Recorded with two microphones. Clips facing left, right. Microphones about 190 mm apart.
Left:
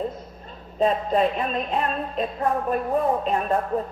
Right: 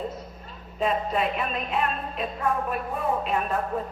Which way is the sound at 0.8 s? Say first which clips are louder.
Left 5 dB; 35° left (ahead or behind).